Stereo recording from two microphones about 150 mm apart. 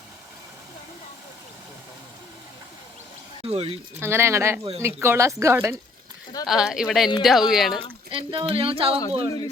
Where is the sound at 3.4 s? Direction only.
40° right (ahead or behind).